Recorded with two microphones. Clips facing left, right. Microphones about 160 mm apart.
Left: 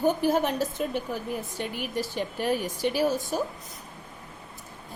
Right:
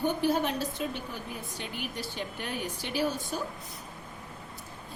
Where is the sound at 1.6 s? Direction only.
45° left (ahead or behind).